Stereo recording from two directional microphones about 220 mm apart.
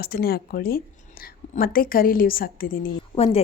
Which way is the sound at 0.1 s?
45° left (ahead or behind).